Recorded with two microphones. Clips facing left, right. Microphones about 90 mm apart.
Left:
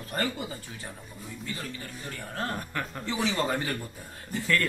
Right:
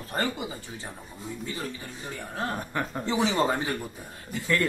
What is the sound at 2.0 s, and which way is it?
Speech, 15° right (ahead or behind).